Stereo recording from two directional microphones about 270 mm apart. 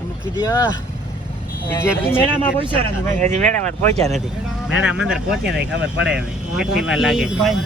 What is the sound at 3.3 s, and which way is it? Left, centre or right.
Speech, right.